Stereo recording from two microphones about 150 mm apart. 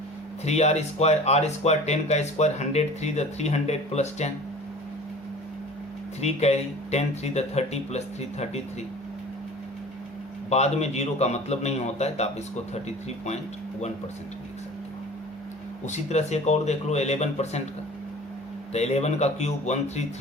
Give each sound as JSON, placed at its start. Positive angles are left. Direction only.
{"t": 0.4, "sound": "speech", "side_deg": 45}
{"t": 6.2, "sound": "speech", "side_deg": 45}
{"t": 10.5, "sound": "speech", "side_deg": 45}
{"t": 15.9, "sound": "speech", "side_deg": 50}
{"t": 18.7, "sound": "speech", "side_deg": 45}